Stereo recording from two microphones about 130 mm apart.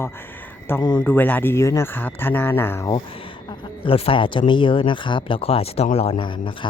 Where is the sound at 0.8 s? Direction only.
35° left (ahead or behind).